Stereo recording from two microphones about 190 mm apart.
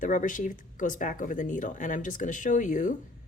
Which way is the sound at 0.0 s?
40° left (ahead or behind).